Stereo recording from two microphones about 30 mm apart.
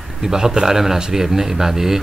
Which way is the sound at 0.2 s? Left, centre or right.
Right.